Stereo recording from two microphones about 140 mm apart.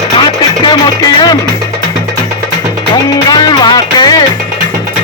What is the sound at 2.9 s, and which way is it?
Music, 30° left (ahead or behind).